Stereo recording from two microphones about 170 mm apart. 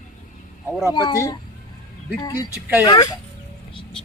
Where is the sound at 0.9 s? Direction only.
25° left (ahead or behind).